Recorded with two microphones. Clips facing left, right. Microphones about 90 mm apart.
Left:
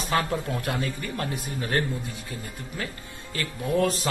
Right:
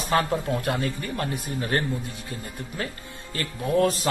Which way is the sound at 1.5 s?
30° right (ahead or behind).